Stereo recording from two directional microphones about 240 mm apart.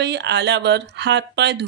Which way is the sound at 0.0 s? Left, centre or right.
Right.